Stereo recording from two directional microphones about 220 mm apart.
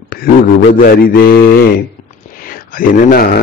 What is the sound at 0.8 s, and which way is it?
Speech, 40° left (ahead or behind).